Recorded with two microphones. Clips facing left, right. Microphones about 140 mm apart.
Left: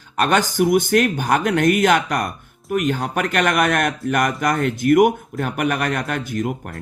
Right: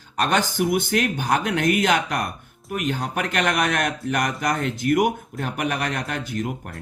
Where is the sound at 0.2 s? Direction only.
55° left (ahead or behind).